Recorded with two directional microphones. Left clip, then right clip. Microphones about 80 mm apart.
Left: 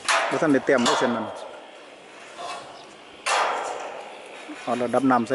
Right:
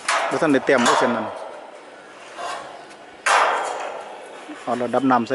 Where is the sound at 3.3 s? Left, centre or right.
Left.